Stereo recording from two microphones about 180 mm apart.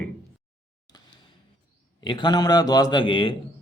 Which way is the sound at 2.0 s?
25° left (ahead or behind).